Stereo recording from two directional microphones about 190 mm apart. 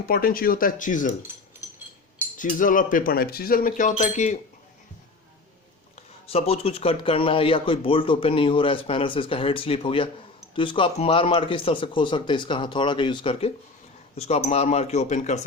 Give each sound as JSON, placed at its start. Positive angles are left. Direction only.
{"t": 0.1, "sound": "speech", "side_deg": 50}
{"t": 2.4, "sound": "speech", "side_deg": 45}
{"t": 6.2, "sound": "speech", "side_deg": 30}